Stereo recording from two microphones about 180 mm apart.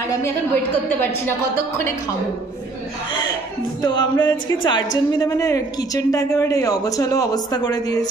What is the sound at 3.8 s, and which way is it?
Speech, 25° left (ahead or behind).